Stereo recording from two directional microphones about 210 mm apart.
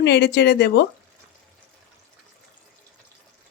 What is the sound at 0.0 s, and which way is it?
Speech, 55° left (ahead or behind).